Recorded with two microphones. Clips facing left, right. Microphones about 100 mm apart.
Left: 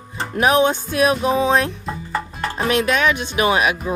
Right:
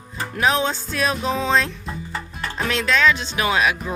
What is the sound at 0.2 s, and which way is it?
Music, 20° left (ahead or behind).